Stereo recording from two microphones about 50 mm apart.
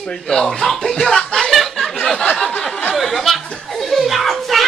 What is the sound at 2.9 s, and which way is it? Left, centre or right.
Chuckle, centre.